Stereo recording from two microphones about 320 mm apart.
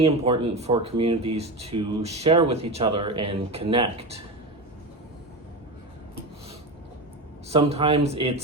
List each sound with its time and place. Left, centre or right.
0.0 s speech: centre
7.4 s speech: centre